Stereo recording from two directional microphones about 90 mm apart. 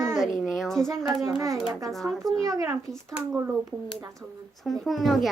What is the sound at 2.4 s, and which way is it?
Speech, 40° right (ahead or behind).